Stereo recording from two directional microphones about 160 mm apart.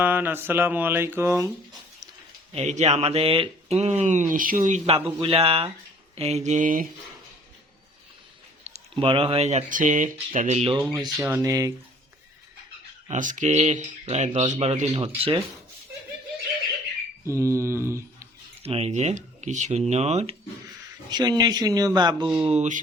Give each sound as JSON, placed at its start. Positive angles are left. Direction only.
{"t": 0.0, "sound": "a sound", "side_deg": -10}
{"t": 2.5, "sound": "speech", "side_deg": -45}
{"t": 5.2, "sound": "speech", "side_deg": -35}
{"t": 8.6, "sound": "speech", "side_deg": -40}
{"t": 11.0, "sound": "speech", "side_deg": -20}
{"t": 13.1, "sound": "speech", "side_deg": -50}
{"t": 17.2, "sound": "a sound", "side_deg": -20}
{"t": 18.6, "sound": "speech", "side_deg": -40}
{"t": 21.1, "sound": "speech", "side_deg": -25}
{"t": 22.4, "sound": "speech", "side_deg": -45}